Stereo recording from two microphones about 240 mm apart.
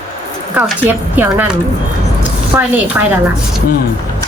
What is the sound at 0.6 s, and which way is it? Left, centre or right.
A woman's voice, centre.